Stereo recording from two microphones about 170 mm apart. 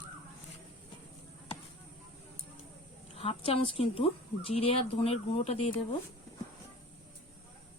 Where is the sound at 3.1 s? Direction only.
35° left (ahead or behind).